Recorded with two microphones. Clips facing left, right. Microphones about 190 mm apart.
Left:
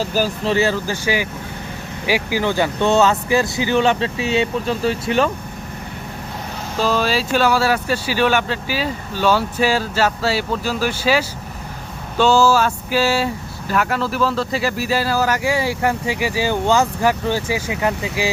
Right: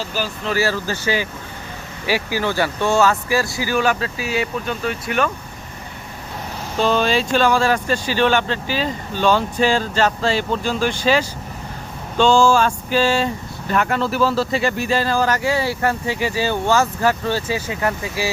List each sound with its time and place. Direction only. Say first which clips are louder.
0.0 s speech: left 5 dB; 40° left (ahead or behind)
0.5 s speech: even; 20° left (ahead or behind)
6.7 s speech: right 1 dB; 5° left (ahead or behind)